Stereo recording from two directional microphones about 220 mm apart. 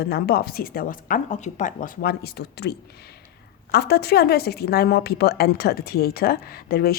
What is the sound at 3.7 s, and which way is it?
Speech, 45° left (ahead or behind).